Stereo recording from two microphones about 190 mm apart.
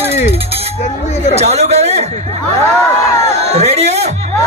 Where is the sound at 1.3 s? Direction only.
35° right (ahead or behind).